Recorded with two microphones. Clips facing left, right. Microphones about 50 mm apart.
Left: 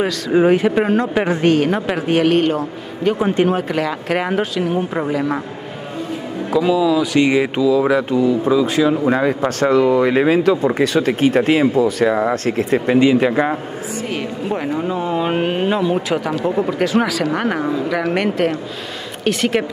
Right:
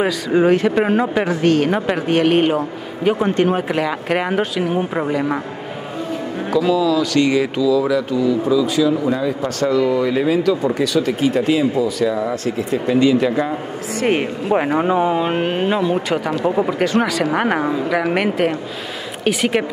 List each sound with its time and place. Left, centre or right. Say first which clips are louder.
0.3 s speech: left 1 dB; centre
0.8 s speech: even; centre
1.3 s speech: left 1 dB; centre
1.6 s speech: even; centre
2.3 s speech: even; centre
3.2 s speech: even; centre
6.5 s speech: left 1 dB; centre; by 12.9 s left
12.9 s speech: left 1 dB; left
14.1 s speech: right 3 dB; right
15.0 s speech: right 3 dB; centre
15.2 s speech: left 1 dB; centre